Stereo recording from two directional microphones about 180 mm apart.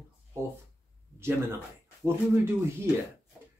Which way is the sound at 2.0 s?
15° right (ahead or behind).